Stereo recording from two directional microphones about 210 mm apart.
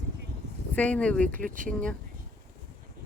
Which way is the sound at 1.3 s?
40° right (ahead or behind).